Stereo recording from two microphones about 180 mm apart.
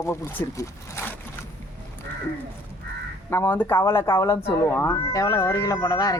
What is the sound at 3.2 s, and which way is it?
Speech, 10° left (ahead or behind).